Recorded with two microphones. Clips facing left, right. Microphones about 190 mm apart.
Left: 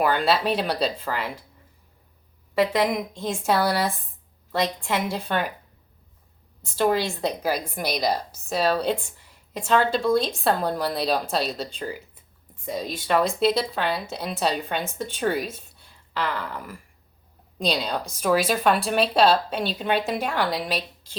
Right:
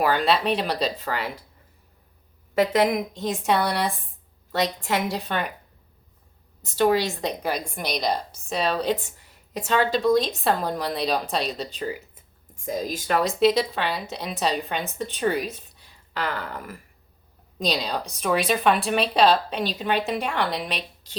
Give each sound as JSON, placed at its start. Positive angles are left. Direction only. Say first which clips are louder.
{"t": 0.0, "sound": "speech", "louder": "even", "side_deg": 0}
{"t": 2.6, "sound": "speech", "louder": "right 2 dB", "side_deg": -5}
{"t": 7.2, "sound": "speech", "louder": "left 2 dB", "side_deg": 5}
{"t": 13.1, "sound": "speech", "louder": "right 1 dB", "side_deg": 0}
{"t": 16.1, "sound": "speech", "louder": "left 1 dB", "side_deg": -45}
{"t": 17.7, "sound": "speech", "louder": "left 1 dB", "side_deg": 0}